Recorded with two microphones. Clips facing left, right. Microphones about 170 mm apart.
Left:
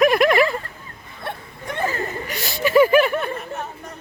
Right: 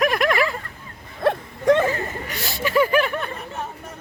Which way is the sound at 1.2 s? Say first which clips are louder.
Right 11 dB; 90° right.